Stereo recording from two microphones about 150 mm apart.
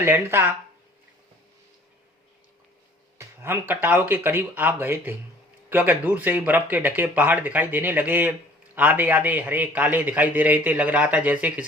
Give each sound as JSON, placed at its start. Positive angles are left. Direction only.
{"t": 0.0, "sound": "speech", "side_deg": -15}
{"t": 3.2, "sound": "speech", "side_deg": -15}